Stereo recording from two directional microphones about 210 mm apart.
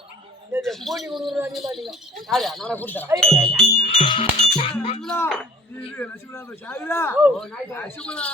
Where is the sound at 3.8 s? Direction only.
25° left (ahead or behind).